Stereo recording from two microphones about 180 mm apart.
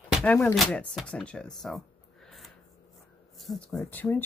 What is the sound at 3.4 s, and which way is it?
Speech, centre (ahead or behind).